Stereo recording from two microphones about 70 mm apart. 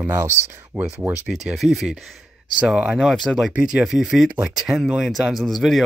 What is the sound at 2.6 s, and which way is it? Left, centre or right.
Speech, centre.